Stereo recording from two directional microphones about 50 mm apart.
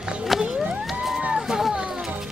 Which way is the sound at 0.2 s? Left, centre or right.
Centre.